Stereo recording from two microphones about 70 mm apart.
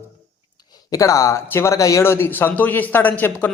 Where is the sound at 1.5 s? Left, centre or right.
Left.